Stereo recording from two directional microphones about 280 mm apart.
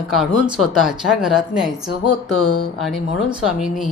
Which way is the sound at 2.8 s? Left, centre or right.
Centre.